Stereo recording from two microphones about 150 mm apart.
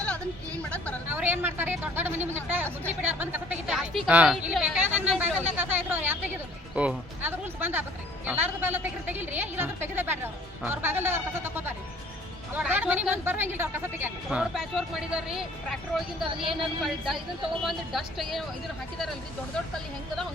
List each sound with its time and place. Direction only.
0.0 s a sound: 10° left (ahead or behind)
1.0 s a woman's voice: 10° right (ahead or behind)
4.5 s a sound: 5° right (ahead or behind)
6.7 s music: 10° right (ahead or behind)
10.7 s speech: 15° right (ahead or behind)
14.3 s speech: centre (ahead or behind)
16.3 s a woman's voice: 35° right (ahead or behind)
17.6 s speech: centre (ahead or behind)